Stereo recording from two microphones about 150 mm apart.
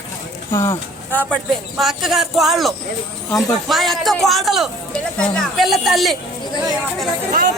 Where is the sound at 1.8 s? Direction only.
Centre (ahead or behind).